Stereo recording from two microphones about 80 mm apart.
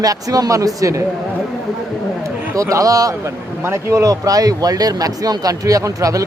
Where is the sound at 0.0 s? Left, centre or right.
Right.